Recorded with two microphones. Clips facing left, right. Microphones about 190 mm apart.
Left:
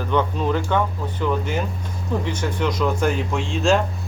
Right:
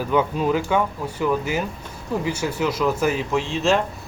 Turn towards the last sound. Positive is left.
turn(degrees=0)  # may be behind; listen again after turning